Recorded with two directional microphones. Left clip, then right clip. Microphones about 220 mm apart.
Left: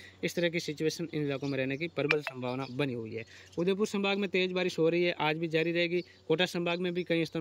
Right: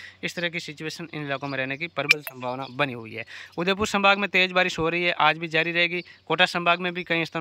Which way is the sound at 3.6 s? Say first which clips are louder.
Right 5 dB; 25° right (ahead or behind).